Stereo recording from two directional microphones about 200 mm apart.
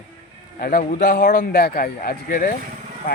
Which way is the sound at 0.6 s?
45° left (ahead or behind).